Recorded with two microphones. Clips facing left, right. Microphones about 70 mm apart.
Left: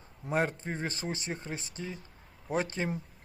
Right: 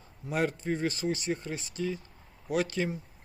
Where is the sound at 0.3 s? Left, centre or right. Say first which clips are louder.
Right 1 dB; left.